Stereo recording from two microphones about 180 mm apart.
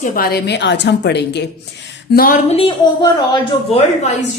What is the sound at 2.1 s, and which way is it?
Speech, 50° left (ahead or behind).